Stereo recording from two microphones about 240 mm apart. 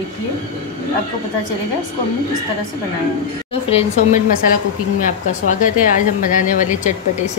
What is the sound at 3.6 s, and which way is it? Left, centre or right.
A woman's voice, left.